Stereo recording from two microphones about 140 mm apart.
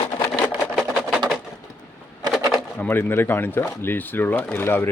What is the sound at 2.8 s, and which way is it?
Speech, 15° left (ahead or behind).